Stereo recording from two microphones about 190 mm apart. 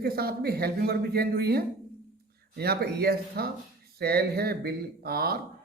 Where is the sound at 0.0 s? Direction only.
55° right (ahead or behind).